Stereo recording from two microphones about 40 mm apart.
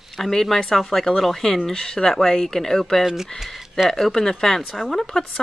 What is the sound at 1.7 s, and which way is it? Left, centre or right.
Speech, centre.